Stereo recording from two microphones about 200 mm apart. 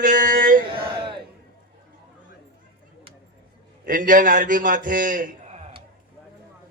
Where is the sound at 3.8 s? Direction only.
45° right (ahead or behind).